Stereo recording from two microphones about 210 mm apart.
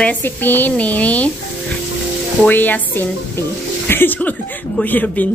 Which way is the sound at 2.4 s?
10° left (ahead or behind).